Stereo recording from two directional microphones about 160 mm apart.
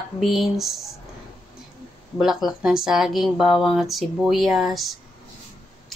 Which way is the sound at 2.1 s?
Centre (ahead or behind).